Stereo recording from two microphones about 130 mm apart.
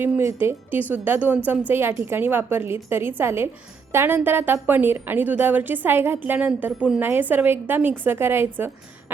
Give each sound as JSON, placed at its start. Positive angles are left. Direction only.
{"t": 0.0, "sound": "a woman's voice", "side_deg": -20}